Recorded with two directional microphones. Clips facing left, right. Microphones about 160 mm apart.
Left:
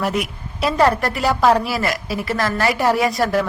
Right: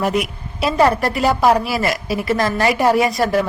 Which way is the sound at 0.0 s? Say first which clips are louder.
Right 3 dB; 15° right (ahead or behind).